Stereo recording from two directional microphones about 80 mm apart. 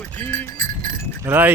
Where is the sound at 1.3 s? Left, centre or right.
Right.